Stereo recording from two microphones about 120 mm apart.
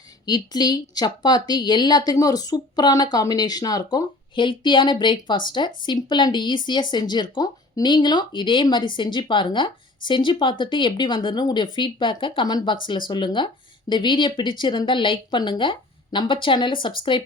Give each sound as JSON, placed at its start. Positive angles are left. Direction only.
{"t": 0.3, "sound": "speech", "side_deg": 35}